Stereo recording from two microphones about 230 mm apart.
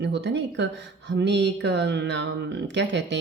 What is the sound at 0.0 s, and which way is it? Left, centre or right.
A woman's voice, right.